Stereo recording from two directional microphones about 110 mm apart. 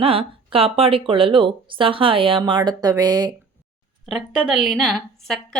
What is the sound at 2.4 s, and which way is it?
Speech, 40° right (ahead or behind).